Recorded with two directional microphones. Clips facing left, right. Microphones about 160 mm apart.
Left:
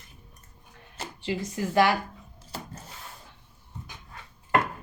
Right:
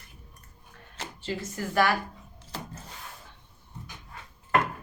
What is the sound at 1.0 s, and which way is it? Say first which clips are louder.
Speech: left 3 dB; 15° left (ahead or behind).